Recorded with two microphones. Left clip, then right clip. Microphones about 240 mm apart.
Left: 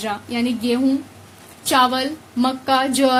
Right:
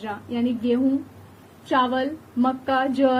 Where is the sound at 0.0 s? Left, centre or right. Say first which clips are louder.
Left 4 dB; left.